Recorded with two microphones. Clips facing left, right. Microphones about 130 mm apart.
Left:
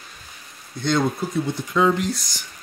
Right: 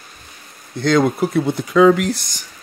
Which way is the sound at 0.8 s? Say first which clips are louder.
Right 6 dB; 90° right.